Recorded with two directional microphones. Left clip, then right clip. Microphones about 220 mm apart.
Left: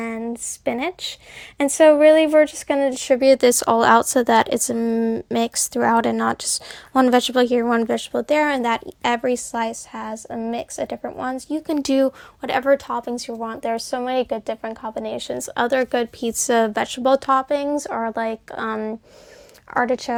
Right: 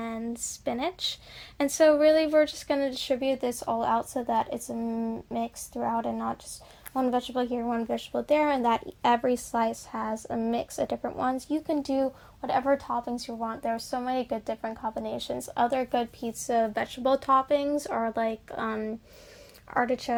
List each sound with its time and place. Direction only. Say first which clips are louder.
0.0 s a sound: left 7 dB; 30° left (ahead or behind)
1.5 s speech: left 8 dB; 25° left (ahead or behind)
3.2 s speech: left 14 dB; 45° left (ahead or behind); by 8.7 s 25° left (ahead or behind)
8.7 s a woman's voice: left 3 dB; 15° left (ahead or behind)
11.8 s speech: left 9 dB; 45° left (ahead or behind); by 20.1 s 20° left (ahead or behind)